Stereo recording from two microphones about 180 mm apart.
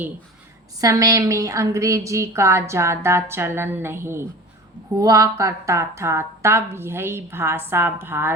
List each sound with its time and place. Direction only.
0.8 s a woman's voice: 20° right (ahead or behind)